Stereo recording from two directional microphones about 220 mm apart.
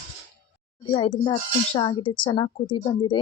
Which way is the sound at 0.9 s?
25° left (ahead or behind).